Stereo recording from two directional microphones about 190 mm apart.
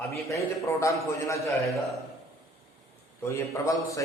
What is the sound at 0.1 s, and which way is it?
A man's voice, 15° left (ahead or behind).